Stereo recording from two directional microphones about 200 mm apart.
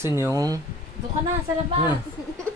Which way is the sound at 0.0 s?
15° right (ahead or behind).